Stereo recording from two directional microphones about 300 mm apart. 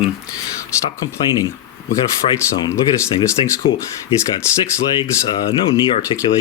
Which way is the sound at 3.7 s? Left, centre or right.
Left.